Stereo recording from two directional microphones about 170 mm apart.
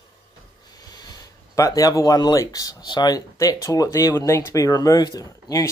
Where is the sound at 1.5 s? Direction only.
20° left (ahead or behind).